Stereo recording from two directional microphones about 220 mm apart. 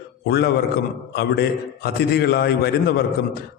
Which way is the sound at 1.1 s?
45° left (ahead or behind).